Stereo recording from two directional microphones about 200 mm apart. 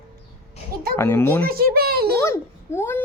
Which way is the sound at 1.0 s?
10° left (ahead or behind).